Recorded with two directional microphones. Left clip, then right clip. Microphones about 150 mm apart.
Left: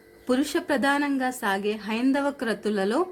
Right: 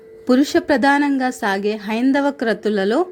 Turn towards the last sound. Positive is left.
turn(degrees=-25)  # may be behind; listen again after turning